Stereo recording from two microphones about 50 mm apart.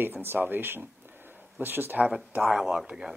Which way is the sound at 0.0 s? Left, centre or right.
Right.